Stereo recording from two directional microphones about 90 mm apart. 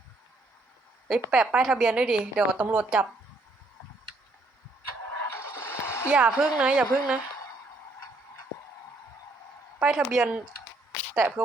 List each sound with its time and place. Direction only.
1.3 s a woman's voice: 10° right (ahead or behind)
5.2 s music: 25° left (ahead or behind)
6.1 s a woman's voice: 10° right (ahead or behind)
9.8 s speech: 5° right (ahead or behind)
11.1 s speech: 20° right (ahead or behind)